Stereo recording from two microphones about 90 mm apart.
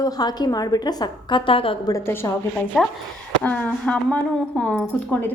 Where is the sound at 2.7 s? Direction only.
5° left (ahead or behind).